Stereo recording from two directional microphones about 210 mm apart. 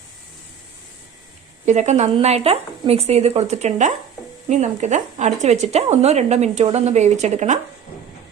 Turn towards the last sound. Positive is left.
turn(degrees=-35)  # may be behind; listen again after turning